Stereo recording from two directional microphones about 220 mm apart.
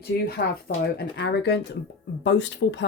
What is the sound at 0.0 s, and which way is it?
Speech, 45° left (ahead or behind).